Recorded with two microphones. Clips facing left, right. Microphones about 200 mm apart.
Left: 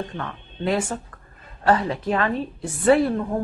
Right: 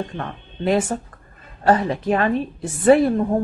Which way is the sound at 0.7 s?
25° right (ahead or behind).